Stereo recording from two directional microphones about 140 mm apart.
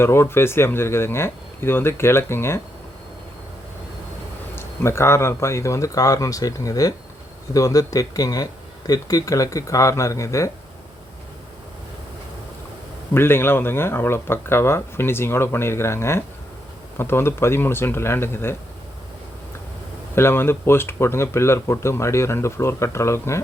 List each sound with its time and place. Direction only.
0.0 s speech: 15° left (ahead or behind)
4.5 s speech: 20° left (ahead or behind)
13.1 s speech: 15° left (ahead or behind)
20.1 s speech: 15° left (ahead or behind)